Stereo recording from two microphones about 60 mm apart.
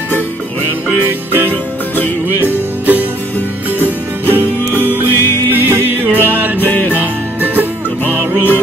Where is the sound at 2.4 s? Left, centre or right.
Right.